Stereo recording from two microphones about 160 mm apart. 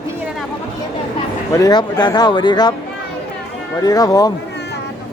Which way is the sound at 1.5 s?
25° left (ahead or behind).